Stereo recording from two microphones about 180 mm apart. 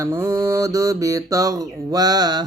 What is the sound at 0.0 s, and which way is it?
Mantra, 15° right (ahead or behind).